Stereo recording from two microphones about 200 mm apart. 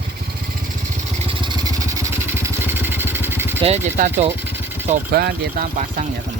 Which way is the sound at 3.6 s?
35° right (ahead or behind).